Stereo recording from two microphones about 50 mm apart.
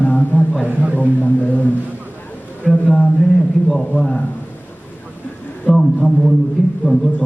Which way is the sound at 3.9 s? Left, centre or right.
Centre.